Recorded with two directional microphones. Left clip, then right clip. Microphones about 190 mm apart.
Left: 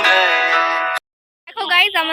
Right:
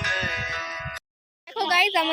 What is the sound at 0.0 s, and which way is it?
Music, 45° left (ahead or behind).